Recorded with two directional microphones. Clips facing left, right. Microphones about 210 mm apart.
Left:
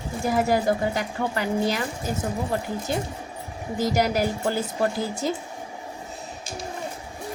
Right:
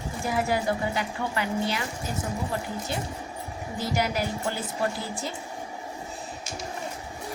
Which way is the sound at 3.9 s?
40° left (ahead or behind).